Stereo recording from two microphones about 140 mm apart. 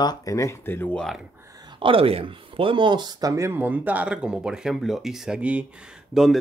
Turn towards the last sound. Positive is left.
turn(degrees=0)  # may be behind; listen again after turning